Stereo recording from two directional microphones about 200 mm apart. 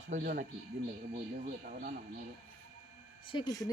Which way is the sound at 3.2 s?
25° left (ahead or behind).